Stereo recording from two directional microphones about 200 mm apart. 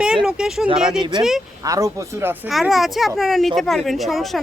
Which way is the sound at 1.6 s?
15° right (ahead or behind).